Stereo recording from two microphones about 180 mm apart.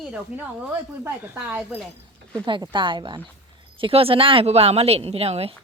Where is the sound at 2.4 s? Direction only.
25° right (ahead or behind).